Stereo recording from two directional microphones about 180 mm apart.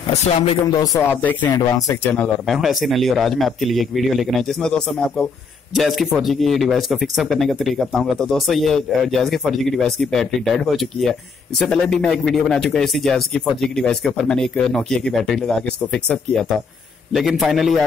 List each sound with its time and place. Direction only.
0.7 s speech: 20° left (ahead or behind)
1.1 s speech: 10° left (ahead or behind)
2.1 s speech: 5° left (ahead or behind)